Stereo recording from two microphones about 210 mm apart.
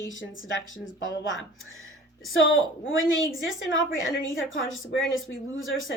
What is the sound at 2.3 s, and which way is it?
Speech, 70° left (ahead or behind).